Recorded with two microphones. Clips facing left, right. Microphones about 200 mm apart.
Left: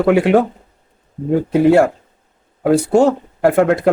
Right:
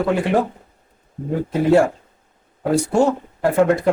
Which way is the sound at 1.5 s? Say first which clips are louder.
Left 3 dB; 65° left (ahead or behind).